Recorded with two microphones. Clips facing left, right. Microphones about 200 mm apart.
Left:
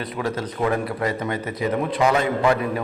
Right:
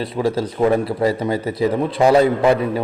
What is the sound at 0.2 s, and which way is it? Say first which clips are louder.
A man's voice: right 7 dB; 35° right (ahead or behind).